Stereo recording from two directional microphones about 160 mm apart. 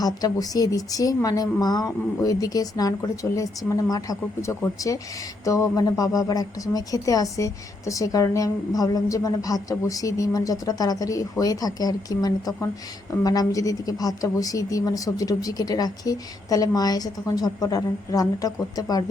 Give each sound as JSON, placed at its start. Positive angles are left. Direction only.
{"t": 0.0, "sound": "a woman's voice", "side_deg": 25}